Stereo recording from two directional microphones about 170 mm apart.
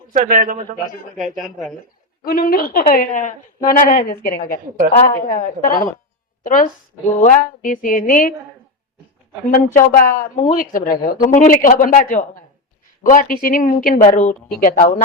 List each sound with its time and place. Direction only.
0.1 s a man's voice: 50° right (ahead or behind)
1.1 s a woman's voice: centre (ahead or behind)
2.2 s a woman's voice: 60° left (ahead or behind)
9.5 s a woman's voice: 55° left (ahead or behind)